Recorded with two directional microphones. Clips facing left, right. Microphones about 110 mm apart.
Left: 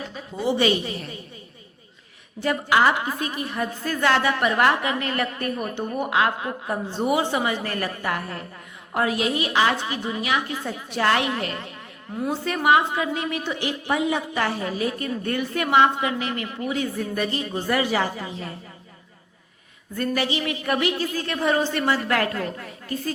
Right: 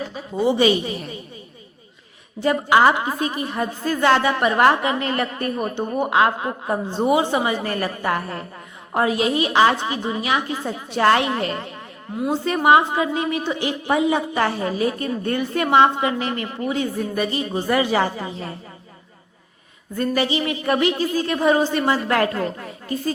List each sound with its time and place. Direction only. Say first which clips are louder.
0.3 s a woman's voice: right 4 dB; 20° right (ahead or behind)
2.4 s a woman's voice: right 4 dB; 25° right (ahead or behind)
12.2 s a woman's voice: right 4 dB; 20° right (ahead or behind)
17.2 s a woman's voice: right 3 dB; 15° right (ahead or behind)
17.7 s a woman's voice: right 3 dB; 30° right (ahead or behind)
20.0 s a woman's voice: right 4 dB; 25° right (ahead or behind)